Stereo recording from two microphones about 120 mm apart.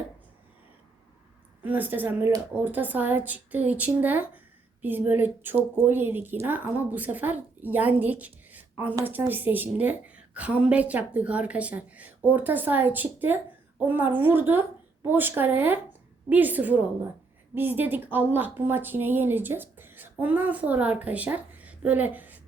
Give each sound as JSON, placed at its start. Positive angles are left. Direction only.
{"t": 1.6, "sound": "a woman's voice", "side_deg": -15}